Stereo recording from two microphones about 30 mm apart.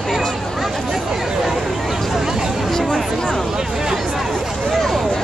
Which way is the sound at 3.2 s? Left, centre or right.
Left.